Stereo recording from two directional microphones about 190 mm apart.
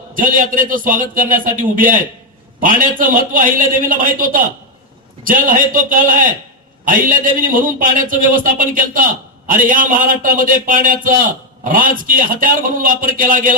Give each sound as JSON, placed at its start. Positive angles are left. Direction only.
{"t": 0.1, "sound": "a man's voice", "side_deg": -45}